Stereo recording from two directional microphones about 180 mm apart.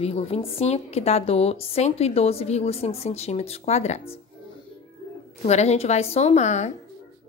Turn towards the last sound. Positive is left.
turn(degrees=40)  # may be behind; listen again after turning